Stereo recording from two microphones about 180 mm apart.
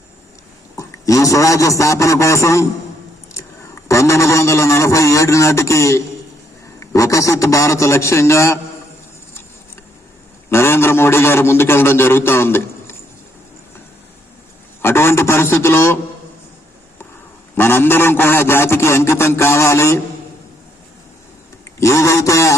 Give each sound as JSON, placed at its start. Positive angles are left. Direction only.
{"t": 0.8, "sound": "a man's voice", "side_deg": 15}
{"t": 3.8, "sound": "a man's voice", "side_deg": 15}
{"t": 10.5, "sound": "a man's voice", "side_deg": 15}
{"t": 14.8, "sound": "a man's voice", "side_deg": 15}
{"t": 17.5, "sound": "a man's voice", "side_deg": 10}
{"t": 21.8, "sound": "a man's voice", "side_deg": 15}